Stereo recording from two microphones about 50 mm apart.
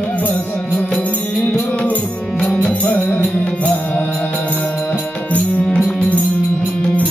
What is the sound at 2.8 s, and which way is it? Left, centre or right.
Music, left.